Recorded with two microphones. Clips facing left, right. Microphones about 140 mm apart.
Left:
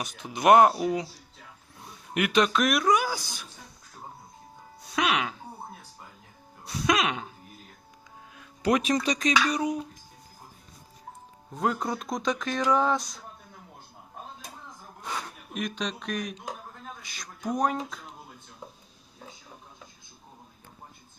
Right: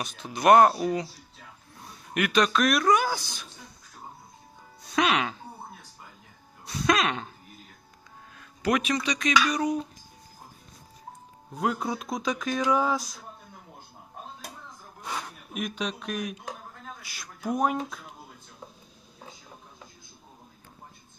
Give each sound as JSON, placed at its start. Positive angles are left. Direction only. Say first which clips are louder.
{"t": 0.0, "sound": "speech", "louder": "even", "side_deg": 15}
{"t": 2.1, "sound": "speech", "louder": "even", "side_deg": 20}
{"t": 2.8, "sound": "a sound", "louder": "right 1 dB", "side_deg": 10}
{"t": 4.9, "sound": "speech", "louder": "right 2 dB", "side_deg": 5}
{"t": 6.8, "sound": "a sound", "louder": "right 1 dB", "side_deg": 15}
{"t": 8.6, "sound": "speech", "louder": "left 2 dB", "side_deg": 35}
{"t": 9.3, "sound": "speech", "louder": "right 3 dB", "side_deg": 25}
{"t": 11.5, "sound": "speech", "louder": "even", "side_deg": 0}
{"t": 15.0, "sound": "speech", "louder": "even", "side_deg": -5}